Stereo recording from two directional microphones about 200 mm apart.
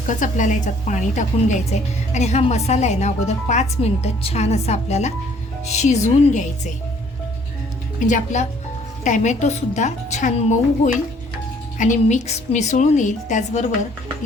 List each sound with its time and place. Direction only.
0.1 s speech: 40° left (ahead or behind)
7.9 s speech: 40° left (ahead or behind)